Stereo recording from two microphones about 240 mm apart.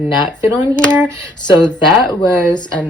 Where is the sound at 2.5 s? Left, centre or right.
Centre.